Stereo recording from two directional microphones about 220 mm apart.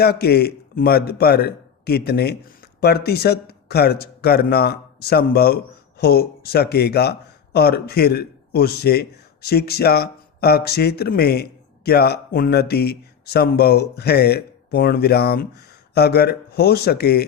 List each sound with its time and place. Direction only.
0.0 s speech: 45° left (ahead or behind)